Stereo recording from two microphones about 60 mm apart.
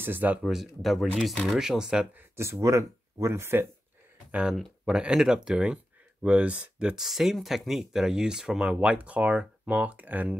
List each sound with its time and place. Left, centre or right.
0.0 s speech: right
0.4 s speech: centre
2.3 s speech: right
4.3 s speech: centre
7.0 s speech: centre; by 10.3 s right